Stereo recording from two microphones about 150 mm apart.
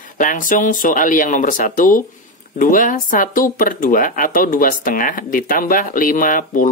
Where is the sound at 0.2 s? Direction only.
65° left (ahead or behind).